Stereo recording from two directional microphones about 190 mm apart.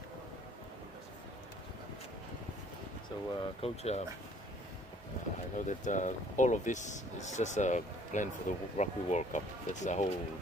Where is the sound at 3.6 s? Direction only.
35° left (ahead or behind).